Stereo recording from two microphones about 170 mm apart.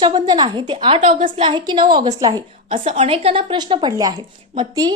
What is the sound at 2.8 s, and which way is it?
A woman's voice, 35° right (ahead or behind).